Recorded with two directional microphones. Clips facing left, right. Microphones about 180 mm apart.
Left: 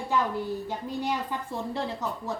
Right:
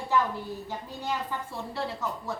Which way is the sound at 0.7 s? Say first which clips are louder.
Left 3 dB; 15° left (ahead or behind).